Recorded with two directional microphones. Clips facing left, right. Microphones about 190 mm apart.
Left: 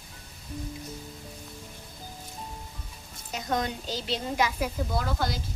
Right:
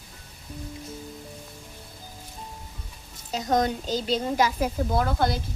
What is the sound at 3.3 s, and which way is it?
A woman's voice, 40° right (ahead or behind).